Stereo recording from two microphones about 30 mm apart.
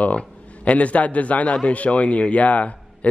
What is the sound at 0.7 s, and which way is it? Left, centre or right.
A man's voice, left.